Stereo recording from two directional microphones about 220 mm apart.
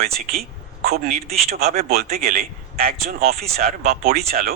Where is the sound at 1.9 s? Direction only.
45° right (ahead or behind).